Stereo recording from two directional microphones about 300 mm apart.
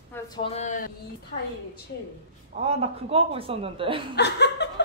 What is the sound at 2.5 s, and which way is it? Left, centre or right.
Speech, centre.